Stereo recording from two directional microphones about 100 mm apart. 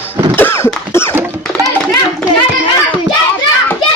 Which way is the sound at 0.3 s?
25° left (ahead or behind).